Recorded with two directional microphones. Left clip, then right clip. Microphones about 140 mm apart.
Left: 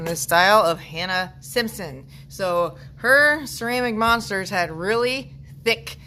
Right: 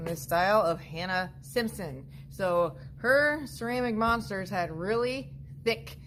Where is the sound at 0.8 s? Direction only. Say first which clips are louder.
Left 7 dB; centre (ahead or behind).